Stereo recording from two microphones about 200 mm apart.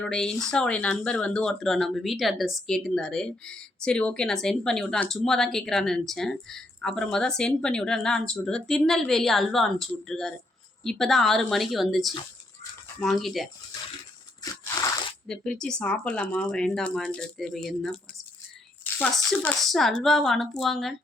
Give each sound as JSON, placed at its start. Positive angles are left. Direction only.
{"t": 0.0, "sound": "speech", "side_deg": 5}
{"t": 14.4, "sound": "a sound", "side_deg": 15}
{"t": 15.3, "sound": "speech", "side_deg": 5}